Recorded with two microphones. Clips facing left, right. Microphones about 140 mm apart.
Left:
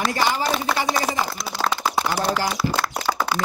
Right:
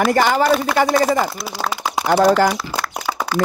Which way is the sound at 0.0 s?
55° right (ahead or behind).